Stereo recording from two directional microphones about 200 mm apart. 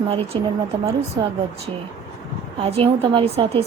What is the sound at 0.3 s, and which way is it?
Speech, 25° right (ahead or behind).